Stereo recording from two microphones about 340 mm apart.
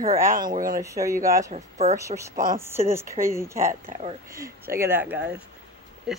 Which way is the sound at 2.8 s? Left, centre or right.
Centre.